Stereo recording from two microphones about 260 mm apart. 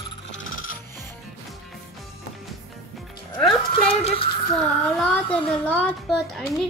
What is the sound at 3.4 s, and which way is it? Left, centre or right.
Speech, left.